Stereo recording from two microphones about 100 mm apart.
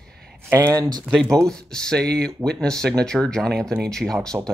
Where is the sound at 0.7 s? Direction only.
40° right (ahead or behind).